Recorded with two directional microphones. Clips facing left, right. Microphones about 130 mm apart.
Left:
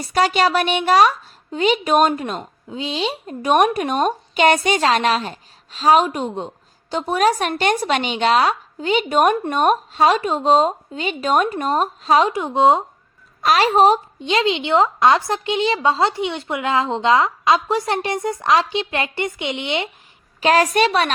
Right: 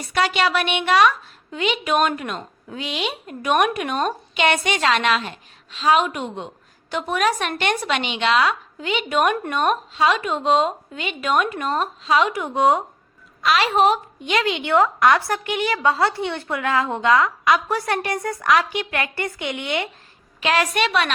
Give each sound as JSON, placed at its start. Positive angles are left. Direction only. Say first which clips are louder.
{"t": 0.0, "sound": "speech", "louder": "left 3 dB", "side_deg": 35}
{"t": 2.4, "sound": "speech", "louder": "left 3 dB", "side_deg": 25}
{"t": 12.3, "sound": "a woman's voice", "louder": "left 3 dB", "side_deg": 25}
{"t": 13.4, "sound": "a woman's voice", "louder": "left 3 dB", "side_deg": 40}
{"t": 20.4, "sound": "speech", "louder": "left 5 dB", "side_deg": 40}